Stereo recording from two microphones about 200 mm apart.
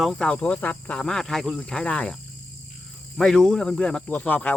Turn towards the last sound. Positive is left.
turn(degrees=10)  # may be behind; listen again after turning